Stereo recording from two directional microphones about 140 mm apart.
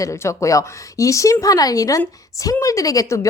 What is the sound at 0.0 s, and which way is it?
A woman's voice, 20° left (ahead or behind).